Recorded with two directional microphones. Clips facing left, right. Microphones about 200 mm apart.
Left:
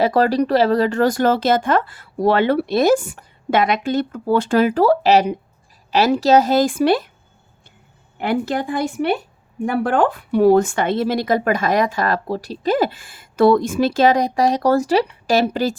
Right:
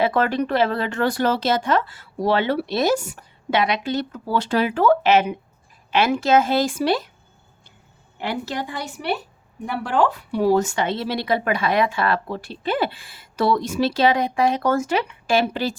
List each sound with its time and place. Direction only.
0.0 s a woman's voice: 35° left (ahead or behind); by 7.0 s 55° left (ahead or behind)
8.2 s speech: 50° left (ahead or behind)